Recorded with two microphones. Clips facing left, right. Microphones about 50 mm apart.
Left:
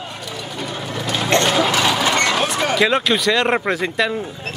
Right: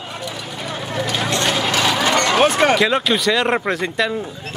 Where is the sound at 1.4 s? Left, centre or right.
Centre.